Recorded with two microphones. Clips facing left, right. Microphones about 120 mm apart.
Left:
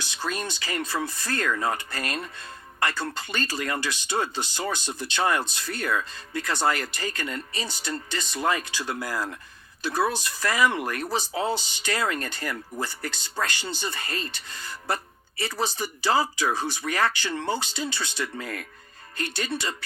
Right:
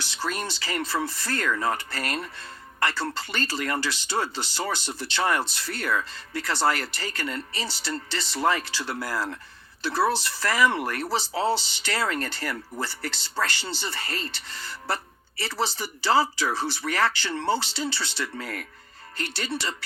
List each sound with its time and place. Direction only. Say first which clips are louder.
0.0 s speech: even; 20° left (ahead or behind)